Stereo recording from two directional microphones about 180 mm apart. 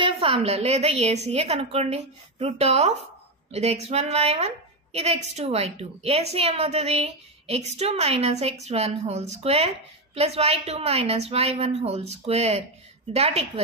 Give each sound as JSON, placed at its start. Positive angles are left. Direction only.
{"t": 0.0, "sound": "a woman's voice", "side_deg": -30}